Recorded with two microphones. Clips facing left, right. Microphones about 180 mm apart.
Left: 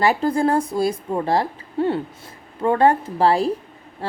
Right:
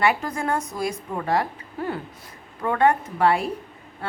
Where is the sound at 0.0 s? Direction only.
30° left (ahead or behind).